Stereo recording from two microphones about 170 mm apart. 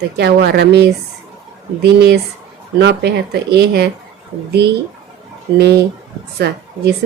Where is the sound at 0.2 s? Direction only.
75° right (ahead or behind).